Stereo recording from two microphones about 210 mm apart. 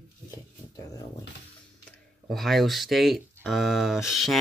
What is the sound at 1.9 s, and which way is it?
Speech, centre (ahead or behind).